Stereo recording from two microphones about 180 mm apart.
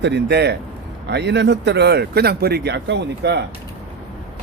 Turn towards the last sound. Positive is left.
turn(degrees=-70)  # may be behind; listen again after turning